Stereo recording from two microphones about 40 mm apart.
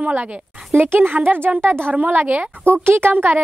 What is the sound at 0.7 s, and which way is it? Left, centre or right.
A woman's voice, right.